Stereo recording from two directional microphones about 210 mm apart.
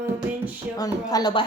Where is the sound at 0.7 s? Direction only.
15° left (ahead or behind).